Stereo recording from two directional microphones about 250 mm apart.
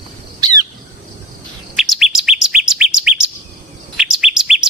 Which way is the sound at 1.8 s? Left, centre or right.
Centre.